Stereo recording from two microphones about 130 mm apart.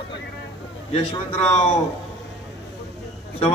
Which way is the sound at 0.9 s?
50° left (ahead or behind).